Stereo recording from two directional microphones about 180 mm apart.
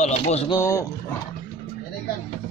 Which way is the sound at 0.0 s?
35° left (ahead or behind).